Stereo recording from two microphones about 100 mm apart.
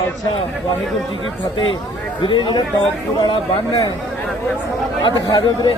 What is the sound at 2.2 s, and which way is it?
Speech, 50° left (ahead or behind).